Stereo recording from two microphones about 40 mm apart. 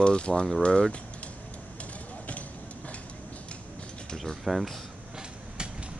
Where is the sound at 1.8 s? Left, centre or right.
Left.